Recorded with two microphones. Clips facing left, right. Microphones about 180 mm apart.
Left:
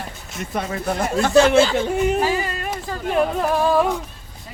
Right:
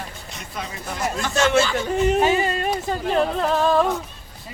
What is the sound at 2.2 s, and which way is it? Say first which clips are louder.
Speech: right 2 dB; 20° right (ahead or behind).